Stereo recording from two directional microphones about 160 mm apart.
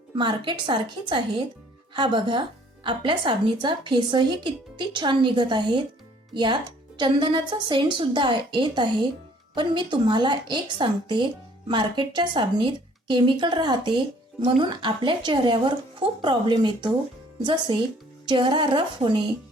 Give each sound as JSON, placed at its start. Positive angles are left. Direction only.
{"t": 0.2, "sound": "a woman's voice", "side_deg": -30}